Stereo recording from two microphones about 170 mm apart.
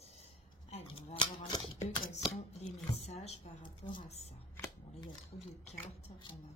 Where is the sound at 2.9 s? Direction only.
40° left (ahead or behind).